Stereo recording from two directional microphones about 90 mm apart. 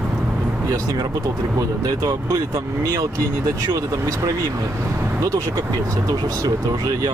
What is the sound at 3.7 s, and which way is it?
Speech, 40° right (ahead or behind).